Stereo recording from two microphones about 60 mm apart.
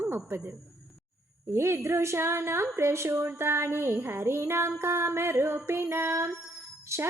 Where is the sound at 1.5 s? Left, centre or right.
Right.